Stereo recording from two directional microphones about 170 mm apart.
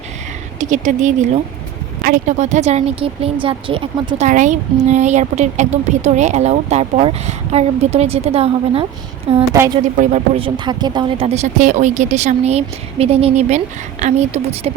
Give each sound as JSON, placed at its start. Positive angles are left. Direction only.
{"t": 0.6, "sound": "a woman's voice", "side_deg": -45}
{"t": 4.3, "sound": "a woman's voice", "side_deg": -45}
{"t": 10.4, "sound": "speech", "side_deg": -25}
{"t": 11.3, "sound": "a woman's voice", "side_deg": -45}